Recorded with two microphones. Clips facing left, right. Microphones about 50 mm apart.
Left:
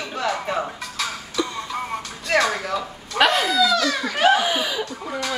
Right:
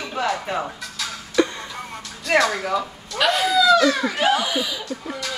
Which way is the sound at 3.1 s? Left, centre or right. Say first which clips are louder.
Left 2 dB; left.